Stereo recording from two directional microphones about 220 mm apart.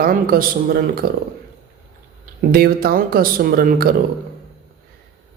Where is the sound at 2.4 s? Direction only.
45° right (ahead or behind).